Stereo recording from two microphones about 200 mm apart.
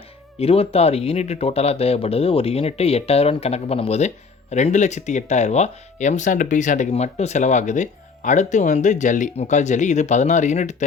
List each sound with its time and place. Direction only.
0.3 s speech: 30° left (ahead or behind)